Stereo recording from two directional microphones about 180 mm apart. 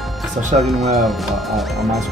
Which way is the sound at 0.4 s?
40° right (ahead or behind).